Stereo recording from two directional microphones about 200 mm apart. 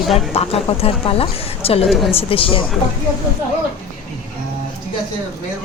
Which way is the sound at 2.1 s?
25° left (ahead or behind).